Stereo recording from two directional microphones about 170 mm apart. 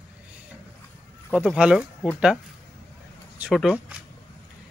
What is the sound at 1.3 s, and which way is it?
Speech, 5° right (ahead or behind).